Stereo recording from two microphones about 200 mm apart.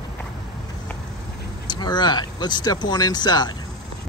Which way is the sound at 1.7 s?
20° left (ahead or behind).